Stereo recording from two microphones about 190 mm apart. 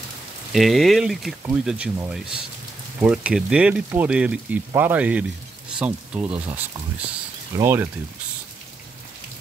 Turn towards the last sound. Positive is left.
turn(degrees=-15)  # may be behind; listen again after turning